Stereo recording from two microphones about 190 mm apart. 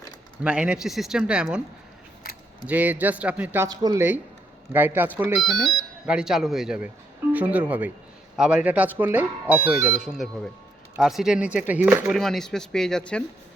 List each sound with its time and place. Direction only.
0.4 s speech: 5° right (ahead or behind)
2.6 s speech: 10° right (ahead or behind)